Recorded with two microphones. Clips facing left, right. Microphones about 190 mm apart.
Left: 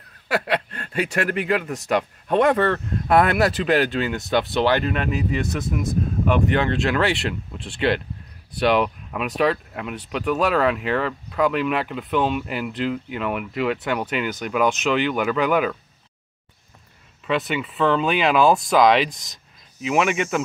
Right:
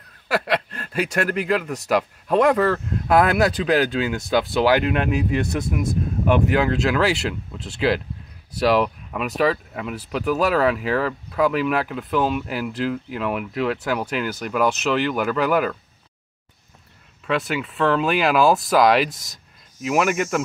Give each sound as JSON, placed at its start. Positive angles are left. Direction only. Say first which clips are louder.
{"t": 0.3, "sound": "speech", "louder": "right 1 dB", "side_deg": 0}
{"t": 6.4, "sound": "speech", "louder": "right 1 dB", "side_deg": -5}
{"t": 17.3, "sound": "speech", "louder": "even", "side_deg": 0}